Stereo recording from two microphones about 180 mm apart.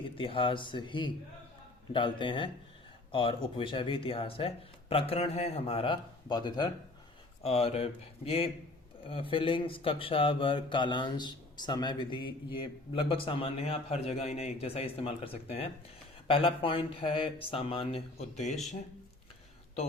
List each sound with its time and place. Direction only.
0.0 s a man's voice: 30° left (ahead or behind)